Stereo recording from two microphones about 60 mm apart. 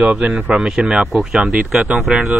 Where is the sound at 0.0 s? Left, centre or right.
Centre.